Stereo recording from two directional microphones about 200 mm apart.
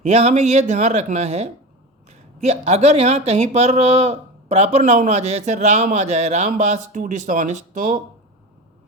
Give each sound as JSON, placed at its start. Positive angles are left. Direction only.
{"t": 0.0, "sound": "speech", "side_deg": -30}